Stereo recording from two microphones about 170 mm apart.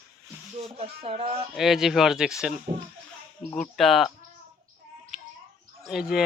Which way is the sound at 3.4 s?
5° left (ahead or behind).